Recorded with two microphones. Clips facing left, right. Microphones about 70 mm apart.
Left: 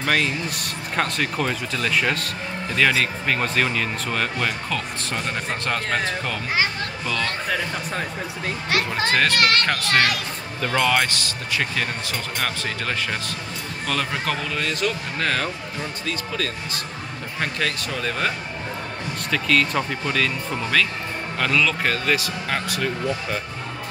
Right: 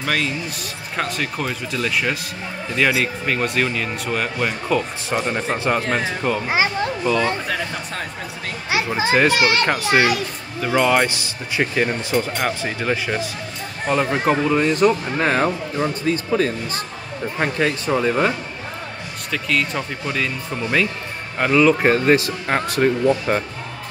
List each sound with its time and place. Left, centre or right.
0.0 s speech: centre
8.6 s speech: centre
19.3 s speech: centre
21.4 s speech: right